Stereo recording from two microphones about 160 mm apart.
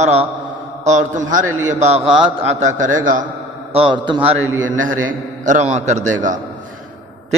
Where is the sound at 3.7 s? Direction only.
35° right (ahead or behind).